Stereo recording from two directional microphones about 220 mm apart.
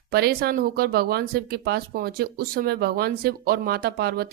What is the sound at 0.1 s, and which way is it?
Speech, 45° right (ahead or behind).